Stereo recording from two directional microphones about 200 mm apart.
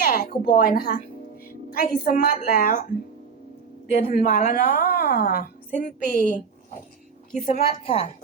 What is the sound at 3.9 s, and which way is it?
A woman's voice, 45° left (ahead or behind).